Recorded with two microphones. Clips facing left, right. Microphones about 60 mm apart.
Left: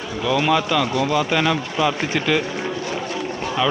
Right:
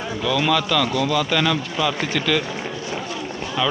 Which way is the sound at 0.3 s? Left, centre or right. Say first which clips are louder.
Left 2 dB; centre.